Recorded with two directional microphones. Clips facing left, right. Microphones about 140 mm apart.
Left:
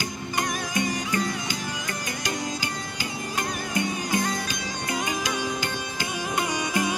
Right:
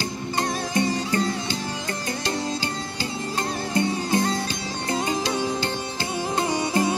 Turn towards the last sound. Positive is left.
turn(degrees=-30)  # may be behind; listen again after turning